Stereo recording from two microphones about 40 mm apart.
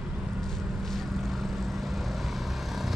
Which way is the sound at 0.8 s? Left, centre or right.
Centre.